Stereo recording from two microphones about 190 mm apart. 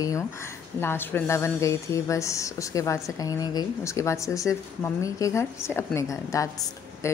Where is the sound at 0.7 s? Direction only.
10° left (ahead or behind).